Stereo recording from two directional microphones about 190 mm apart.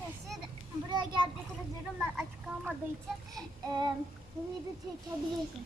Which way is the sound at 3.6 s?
20° right (ahead or behind).